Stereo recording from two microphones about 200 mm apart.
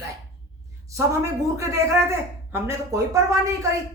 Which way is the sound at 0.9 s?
15° right (ahead or behind).